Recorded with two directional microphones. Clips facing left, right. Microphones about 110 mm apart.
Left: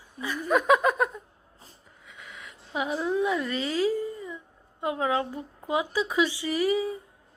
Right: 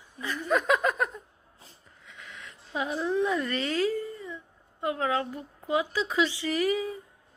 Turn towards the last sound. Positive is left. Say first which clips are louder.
# left 2 dB
turn(degrees=15)  # may be behind; listen again after turning